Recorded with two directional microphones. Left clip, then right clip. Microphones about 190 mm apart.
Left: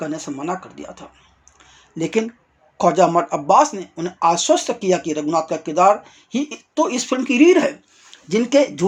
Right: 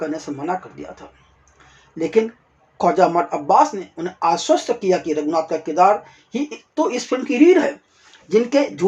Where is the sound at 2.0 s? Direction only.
30° left (ahead or behind).